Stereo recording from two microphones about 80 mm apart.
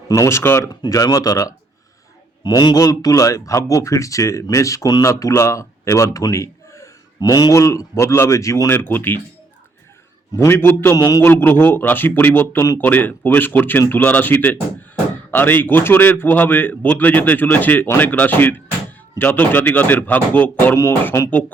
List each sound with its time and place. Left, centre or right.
0.1 s a man's voice: left
0.7 s speech: left
2.4 s speech: left
7.2 s speech: left
7.5 s a man's voice: left
8.7 s a man's voice: left
10.3 s a man's voice: left
10.9 s speech: left
11.2 s a man's voice: left